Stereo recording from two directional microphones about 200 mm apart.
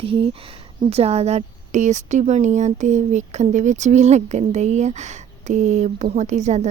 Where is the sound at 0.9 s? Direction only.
30° right (ahead or behind).